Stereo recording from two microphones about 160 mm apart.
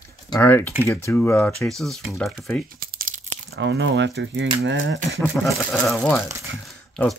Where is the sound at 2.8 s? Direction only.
60° right (ahead or behind).